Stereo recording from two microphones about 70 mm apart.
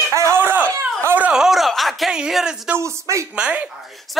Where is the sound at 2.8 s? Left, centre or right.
Right.